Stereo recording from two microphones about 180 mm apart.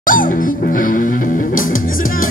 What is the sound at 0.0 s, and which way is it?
Music, 50° left (ahead or behind).